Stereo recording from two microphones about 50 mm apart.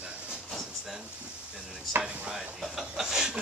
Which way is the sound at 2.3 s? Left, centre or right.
Centre.